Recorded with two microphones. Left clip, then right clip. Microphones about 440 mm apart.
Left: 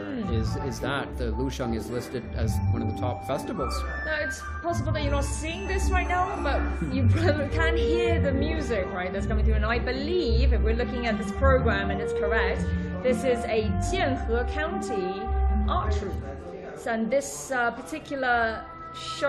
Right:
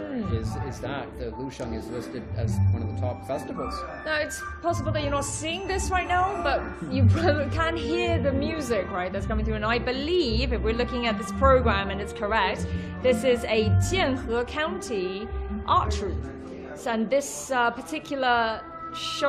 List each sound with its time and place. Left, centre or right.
0.9 s speech: left
4.0 s a woman's voice: right